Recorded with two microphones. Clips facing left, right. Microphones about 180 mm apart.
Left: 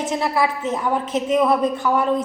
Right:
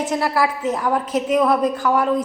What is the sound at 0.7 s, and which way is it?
Speech, centre (ahead or behind).